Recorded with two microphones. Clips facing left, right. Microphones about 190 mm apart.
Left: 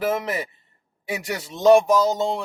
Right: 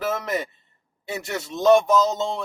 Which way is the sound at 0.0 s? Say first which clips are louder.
Left 2 dB; 10° left (ahead or behind).